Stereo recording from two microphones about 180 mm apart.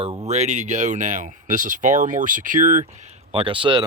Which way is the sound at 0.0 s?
30° right (ahead or behind).